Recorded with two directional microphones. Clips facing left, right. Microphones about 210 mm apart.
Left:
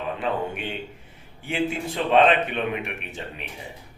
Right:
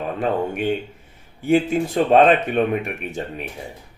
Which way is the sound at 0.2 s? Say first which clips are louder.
Right 9 dB; 45° right (ahead or behind).